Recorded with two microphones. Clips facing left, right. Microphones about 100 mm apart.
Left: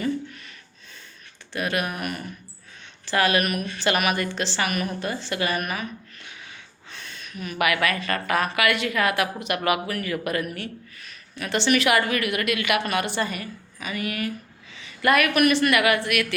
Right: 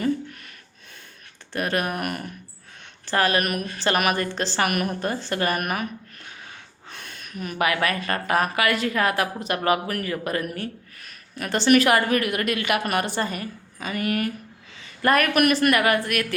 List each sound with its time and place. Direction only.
1.5 s a woman's voice: 45° right (ahead or behind)
3.1 s a woman's voice: 40° right (ahead or behind)
7.6 s a woman's voice: 35° right (ahead or behind)
15.0 s a woman's voice: 35° right (ahead or behind)
15.4 s a woman's voice: 50° right (ahead or behind)